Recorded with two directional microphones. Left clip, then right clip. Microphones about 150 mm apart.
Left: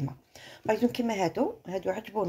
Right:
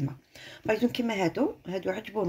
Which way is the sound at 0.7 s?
Centre (ahead or behind).